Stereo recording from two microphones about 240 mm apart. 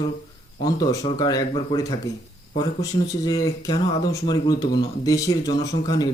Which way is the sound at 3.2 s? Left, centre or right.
Centre.